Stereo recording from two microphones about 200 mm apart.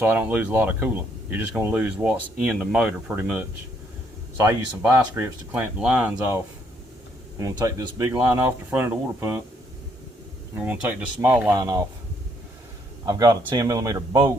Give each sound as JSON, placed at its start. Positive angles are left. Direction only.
{"t": 0.0, "sound": "speech", "side_deg": -10}
{"t": 4.4, "sound": "speech", "side_deg": -10}
{"t": 10.5, "sound": "a man's voice", "side_deg": -10}
{"t": 13.1, "sound": "a man's voice", "side_deg": -20}